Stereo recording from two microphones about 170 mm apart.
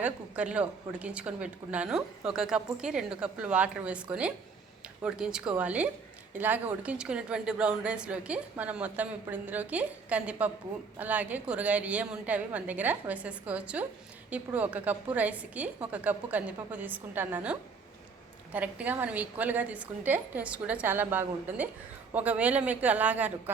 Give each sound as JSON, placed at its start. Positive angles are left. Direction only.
{"t": 0.0, "sound": "a woman's voice", "side_deg": -5}